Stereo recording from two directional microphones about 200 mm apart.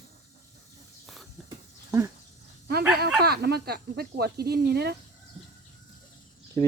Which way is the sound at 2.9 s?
50° right (ahead or behind).